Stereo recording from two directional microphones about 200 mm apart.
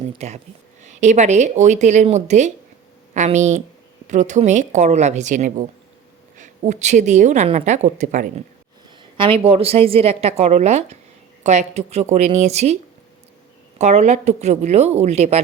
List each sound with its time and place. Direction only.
0.2 s a woman's voice: 35° right (ahead or behind)
9.1 s a woman's voice: 25° right (ahead or behind)
13.7 s a woman's voice: 35° right (ahead or behind)